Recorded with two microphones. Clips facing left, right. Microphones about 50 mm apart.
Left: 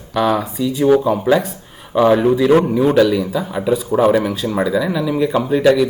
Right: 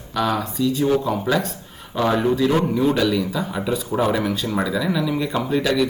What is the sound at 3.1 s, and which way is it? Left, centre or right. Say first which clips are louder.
Speech: left 4 dB; centre.